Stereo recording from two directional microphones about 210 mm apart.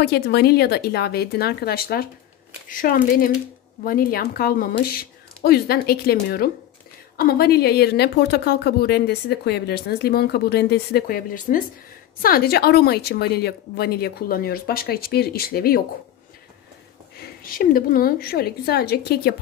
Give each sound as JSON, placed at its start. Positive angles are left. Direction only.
{"t": 0.0, "sound": "a woman's voice", "side_deg": 50}
{"t": 17.4, "sound": "a woman's voice", "side_deg": 45}